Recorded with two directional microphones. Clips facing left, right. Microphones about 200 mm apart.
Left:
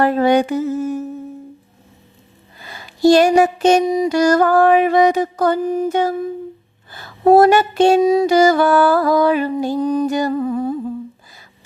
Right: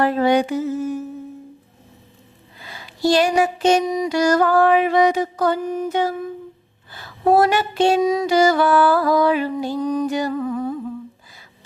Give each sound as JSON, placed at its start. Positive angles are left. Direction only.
{"t": 0.0, "sound": "music", "side_deg": 50}
{"t": 2.6, "sound": "speech", "side_deg": 45}
{"t": 3.8, "sound": "music", "side_deg": 30}
{"t": 4.1, "sound": "music", "side_deg": 45}
{"t": 5.6, "sound": "a sound", "side_deg": 30}
{"t": 5.9, "sound": "music", "side_deg": 45}
{"t": 8.0, "sound": "a sound", "side_deg": 30}
{"t": 8.3, "sound": "music", "side_deg": 45}
{"t": 9.8, "sound": "music", "side_deg": 30}
{"t": 10.1, "sound": "music", "side_deg": 45}
{"t": 10.3, "sound": "humming", "side_deg": 30}